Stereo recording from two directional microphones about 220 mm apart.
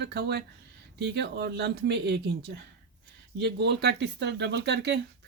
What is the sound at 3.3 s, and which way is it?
Speech, 50° right (ahead or behind).